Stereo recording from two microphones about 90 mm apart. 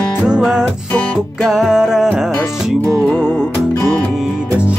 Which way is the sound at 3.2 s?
25° left (ahead or behind).